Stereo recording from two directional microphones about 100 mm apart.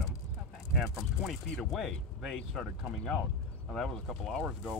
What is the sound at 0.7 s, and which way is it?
Speech, centre (ahead or behind).